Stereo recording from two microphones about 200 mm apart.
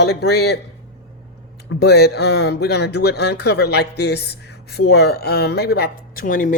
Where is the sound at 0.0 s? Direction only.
55° left (ahead or behind).